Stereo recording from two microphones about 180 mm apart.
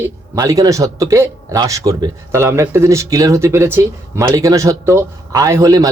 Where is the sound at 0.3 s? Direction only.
20° right (ahead or behind).